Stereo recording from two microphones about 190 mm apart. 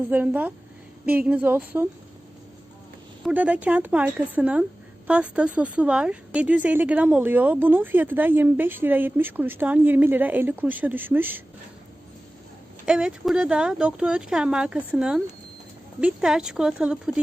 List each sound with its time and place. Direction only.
0.1 s speech: 10° right (ahead or behind)
3.2 s speech: 5° right (ahead or behind)
12.8 s speech: 5° right (ahead or behind)